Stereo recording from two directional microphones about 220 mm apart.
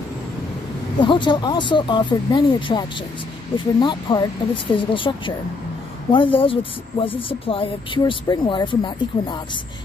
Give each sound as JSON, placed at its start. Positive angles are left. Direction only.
{"t": 0.9, "sound": "speech", "side_deg": 20}